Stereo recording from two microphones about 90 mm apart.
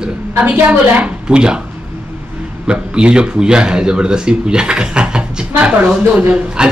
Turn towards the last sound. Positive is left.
turn(degrees=-10)  # may be behind; listen again after turning